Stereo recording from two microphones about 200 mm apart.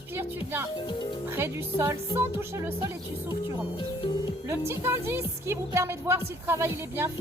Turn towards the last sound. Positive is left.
turn(degrees=-10)  # may be behind; listen again after turning